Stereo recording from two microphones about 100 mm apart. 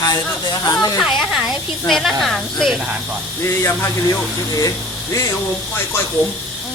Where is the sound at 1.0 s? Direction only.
10° right (ahead or behind).